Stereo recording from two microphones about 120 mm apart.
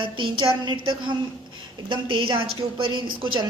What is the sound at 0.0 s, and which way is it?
A woman's voice, 45° right (ahead or behind).